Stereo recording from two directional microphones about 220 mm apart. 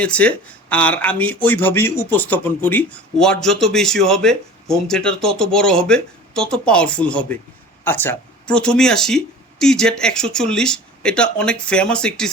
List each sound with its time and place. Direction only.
0.0 s speech: 5° left (ahead or behind)